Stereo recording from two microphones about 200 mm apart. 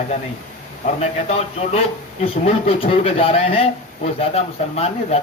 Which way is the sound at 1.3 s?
30° left (ahead or behind).